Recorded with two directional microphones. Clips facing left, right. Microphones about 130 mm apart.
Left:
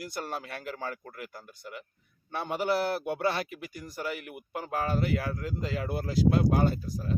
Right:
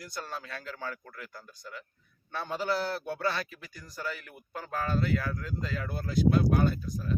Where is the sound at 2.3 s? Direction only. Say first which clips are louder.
Left 3 dB; 20° left (ahead or behind).